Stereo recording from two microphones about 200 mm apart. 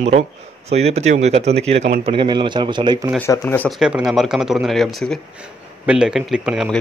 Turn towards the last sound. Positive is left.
turn(degrees=-5)  # may be behind; listen again after turning